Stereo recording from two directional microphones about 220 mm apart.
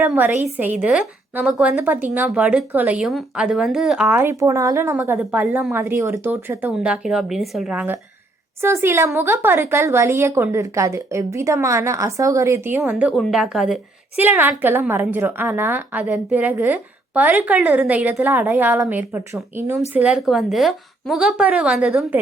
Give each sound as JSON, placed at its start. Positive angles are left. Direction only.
{"t": 0.0, "sound": "a woman's voice", "side_deg": -10}